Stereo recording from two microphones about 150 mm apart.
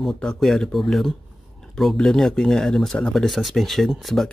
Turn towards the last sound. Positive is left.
turn(degrees=0)  # may be behind; listen again after turning